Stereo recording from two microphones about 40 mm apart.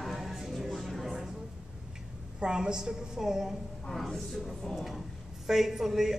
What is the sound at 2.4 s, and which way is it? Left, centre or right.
A man's voice, centre.